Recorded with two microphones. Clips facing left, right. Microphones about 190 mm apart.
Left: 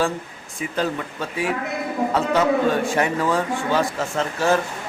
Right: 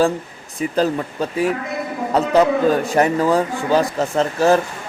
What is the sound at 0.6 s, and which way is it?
Speech, 35° right (ahead or behind).